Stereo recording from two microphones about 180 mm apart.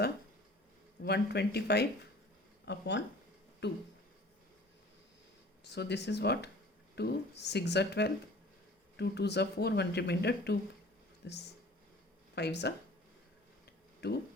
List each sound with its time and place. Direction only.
1.0 s speech: 65° left (ahead or behind)
5.6 s speech: 70° left (ahead or behind)
14.0 s speech: 65° left (ahead or behind)